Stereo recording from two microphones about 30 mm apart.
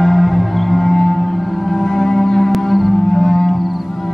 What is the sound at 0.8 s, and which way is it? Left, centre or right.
Music, centre.